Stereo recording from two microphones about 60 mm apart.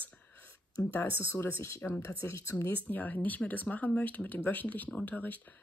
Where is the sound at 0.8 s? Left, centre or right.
Left.